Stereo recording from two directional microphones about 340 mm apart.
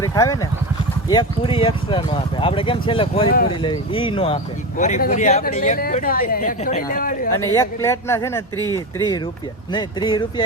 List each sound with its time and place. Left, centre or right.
0.0 s speech: centre
7.3 s speech: centre